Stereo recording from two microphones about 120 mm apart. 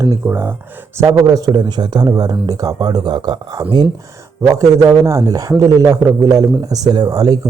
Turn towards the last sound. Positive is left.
turn(degrees=-35)  # may be behind; listen again after turning